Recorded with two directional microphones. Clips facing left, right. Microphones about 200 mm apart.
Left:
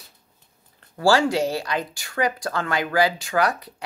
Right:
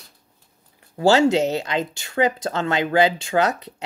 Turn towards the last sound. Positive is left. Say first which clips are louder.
# right 2 dB
turn(degrees=-25)  # may be behind; listen again after turning